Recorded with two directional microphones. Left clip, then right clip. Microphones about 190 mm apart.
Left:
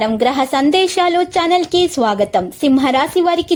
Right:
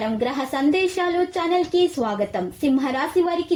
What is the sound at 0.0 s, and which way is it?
Speech, 20° left (ahead or behind).